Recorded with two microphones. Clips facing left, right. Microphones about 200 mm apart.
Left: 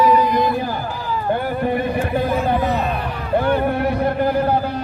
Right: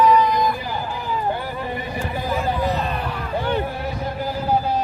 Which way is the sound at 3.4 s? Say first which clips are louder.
Left 7 dB; 60° left (ahead or behind).